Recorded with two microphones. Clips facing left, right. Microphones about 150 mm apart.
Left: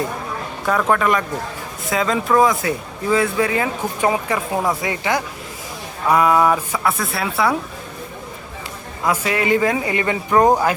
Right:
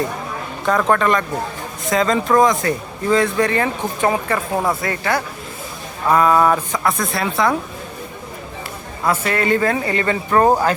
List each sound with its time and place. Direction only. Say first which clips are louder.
0.6 s speech: right 1 dB; 5° left (ahead or behind)
9.0 s speech: right 1 dB; 10° left (ahead or behind)